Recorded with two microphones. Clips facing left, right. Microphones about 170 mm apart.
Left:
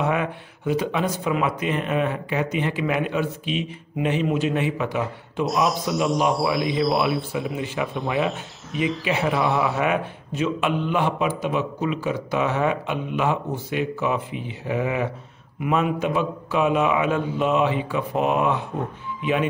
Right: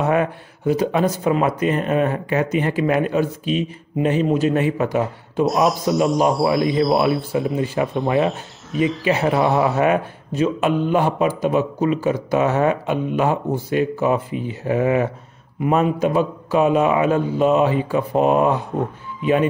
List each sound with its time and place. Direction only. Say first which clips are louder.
0.0 s a man's voice: right 5 dB; 40° right (ahead or behind)
5.4 s a man's voice: right 5 dB; centre (ahead or behind)
7.5 s a man's voice: right 6 dB; 40° right (ahead or behind)
8.0 s a man's voice: right 5 dB; centre (ahead or behind)
9.0 s a man's voice: right 5 dB; 40° right (ahead or behind)